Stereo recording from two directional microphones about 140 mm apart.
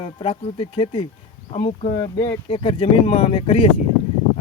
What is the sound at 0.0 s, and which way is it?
Speech, 45° left (ahead or behind).